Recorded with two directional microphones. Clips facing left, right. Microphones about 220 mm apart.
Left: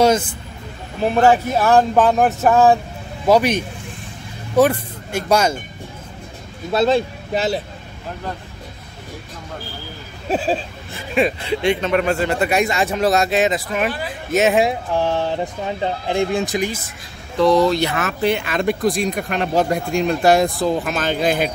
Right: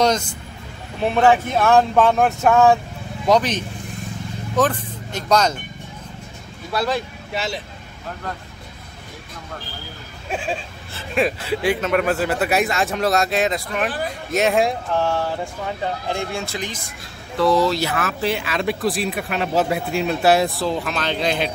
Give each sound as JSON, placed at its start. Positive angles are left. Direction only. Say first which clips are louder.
{"t": 0.0, "sound": "speech", "louder": "left 4 dB", "side_deg": 5}
{"t": 6.7, "sound": "speech", "louder": "left 6 dB", "side_deg": 25}
{"t": 10.2, "sound": "speech", "louder": "left 6 dB", "side_deg": 35}
{"t": 11.1, "sound": "speech", "louder": "left 2 dB", "side_deg": -5}
{"t": 14.9, "sound": "speech", "louder": "left 2 dB", "side_deg": 15}
{"t": 17.4, "sound": "speech", "louder": "left 3 dB", "side_deg": -5}